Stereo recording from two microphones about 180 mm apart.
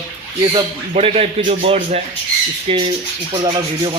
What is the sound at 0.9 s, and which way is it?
Speech, 35° right (ahead or behind).